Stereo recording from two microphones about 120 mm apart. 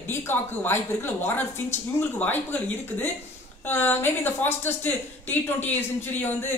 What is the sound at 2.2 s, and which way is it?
A woman's voice, 15° left (ahead or behind).